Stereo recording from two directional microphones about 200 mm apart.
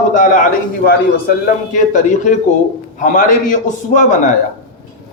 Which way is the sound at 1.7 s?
40° left (ahead or behind).